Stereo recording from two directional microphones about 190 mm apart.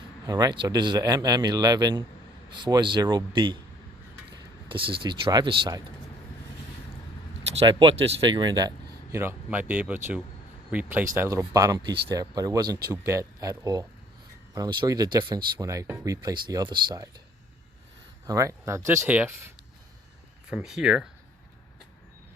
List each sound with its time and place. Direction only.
0.3 s speech: 20° right (ahead or behind)
4.7 s speech: 25° right (ahead or behind)
7.6 s speech: 25° right (ahead or behind)
9.1 s speech: 10° right (ahead or behind)
18.3 s speech: 15° right (ahead or behind)